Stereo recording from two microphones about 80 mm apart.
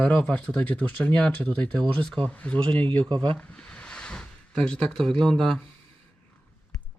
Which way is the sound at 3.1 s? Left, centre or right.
Right.